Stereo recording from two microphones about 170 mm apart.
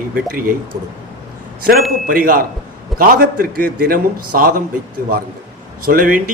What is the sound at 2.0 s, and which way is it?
A man's voice, 55° right (ahead or behind).